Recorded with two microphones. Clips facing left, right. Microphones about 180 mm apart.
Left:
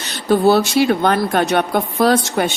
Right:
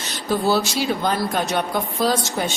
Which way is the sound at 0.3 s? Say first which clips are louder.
Left 7 dB; 60° left (ahead or behind).